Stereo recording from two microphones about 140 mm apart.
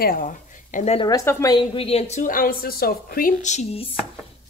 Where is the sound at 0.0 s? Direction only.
80° left.